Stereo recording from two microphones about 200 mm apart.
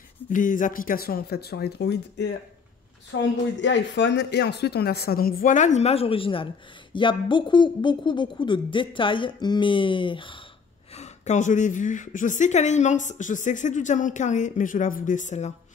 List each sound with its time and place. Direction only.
0.3 s speech: 40° left (ahead or behind); by 10.4 s 25° left (ahead or behind)
11.0 s a woman's voice: 35° left (ahead or behind)